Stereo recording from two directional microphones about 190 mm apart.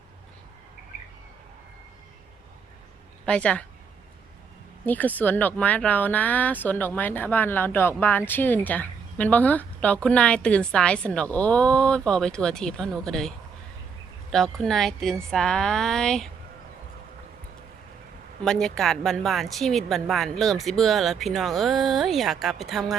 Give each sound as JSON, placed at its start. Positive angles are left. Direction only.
{"t": 3.2, "sound": "speech", "side_deg": 5}
{"t": 4.9, "sound": "speech", "side_deg": 10}
{"t": 18.4, "sound": "speech", "side_deg": 5}